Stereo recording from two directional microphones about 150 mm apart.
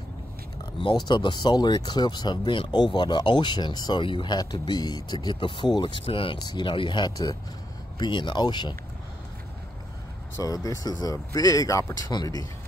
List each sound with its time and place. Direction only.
0.7 s speech: 30° left (ahead or behind)
10.4 s speech: 25° left (ahead or behind)